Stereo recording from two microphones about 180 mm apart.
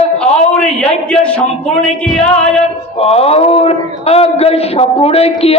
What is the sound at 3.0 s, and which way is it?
A man's voice, 35° left (ahead or behind).